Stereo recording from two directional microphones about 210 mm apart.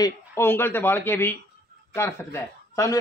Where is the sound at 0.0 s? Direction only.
10° left (ahead or behind).